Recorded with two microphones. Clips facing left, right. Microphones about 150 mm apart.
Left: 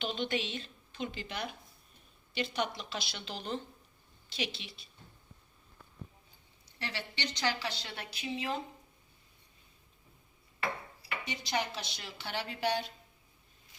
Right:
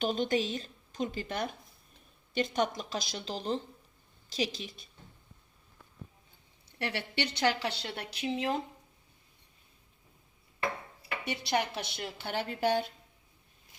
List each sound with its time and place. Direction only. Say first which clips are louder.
0.0 s a woman's voice: right 5 dB; 40° right (ahead or behind)
6.7 s speech: right 7 dB; 60° right (ahead or behind)
11.3 s a woman's voice: right 4 dB; 60° right (ahead or behind)